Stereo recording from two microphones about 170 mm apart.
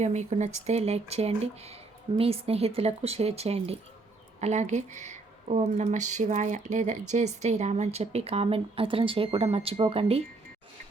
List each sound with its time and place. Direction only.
0.0 s speech: 40° right (ahead or behind)